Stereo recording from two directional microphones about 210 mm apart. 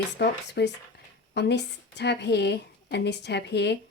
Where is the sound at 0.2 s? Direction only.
55° left (ahead or behind).